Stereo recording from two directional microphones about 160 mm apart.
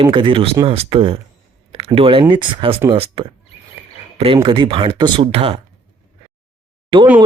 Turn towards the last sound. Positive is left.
turn(degrees=-30)  # may be behind; listen again after turning